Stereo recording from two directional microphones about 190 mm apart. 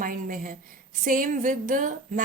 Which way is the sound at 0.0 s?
45° right (ahead or behind).